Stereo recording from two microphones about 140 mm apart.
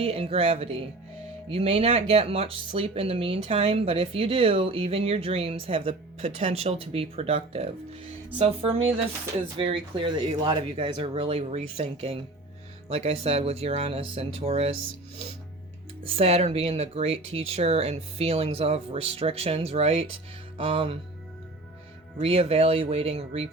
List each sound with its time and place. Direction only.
0.0 s speech: 45° right (ahead or behind)
16.0 s speech: 45° right (ahead or behind)
22.2 s speech: 45° right (ahead or behind)